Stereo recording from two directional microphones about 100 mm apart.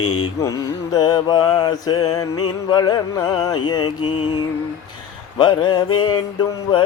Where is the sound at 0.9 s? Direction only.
45° left (ahead or behind).